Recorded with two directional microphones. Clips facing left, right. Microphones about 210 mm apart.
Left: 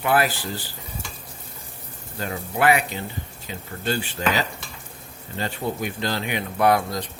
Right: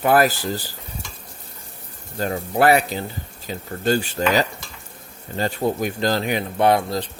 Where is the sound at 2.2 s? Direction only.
40° right (ahead or behind).